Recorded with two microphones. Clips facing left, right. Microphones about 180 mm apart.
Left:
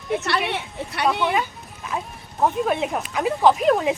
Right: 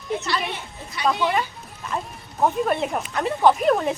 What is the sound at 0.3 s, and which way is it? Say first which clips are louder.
Speech: left 3 dB; 70° left (ahead or behind).